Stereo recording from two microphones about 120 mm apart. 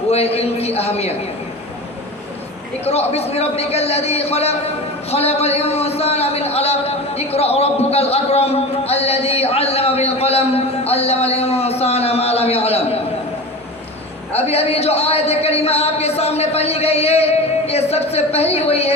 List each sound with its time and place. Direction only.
0.1 s a man's voice: 60° left (ahead or behind)
2.8 s a man's voice: 60° left (ahead or behind)
14.3 s speech: 60° left (ahead or behind)